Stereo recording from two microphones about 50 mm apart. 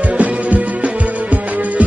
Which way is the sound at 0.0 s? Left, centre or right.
Right.